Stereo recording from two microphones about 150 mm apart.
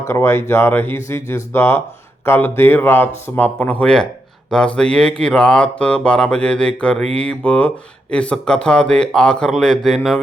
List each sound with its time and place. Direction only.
0.1 s mantra: 15° left (ahead or behind)
8.1 s a man's voice: 5° left (ahead or behind)